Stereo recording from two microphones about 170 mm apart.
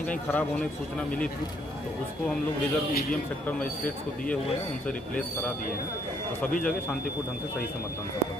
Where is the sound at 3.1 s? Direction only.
10° left (ahead or behind).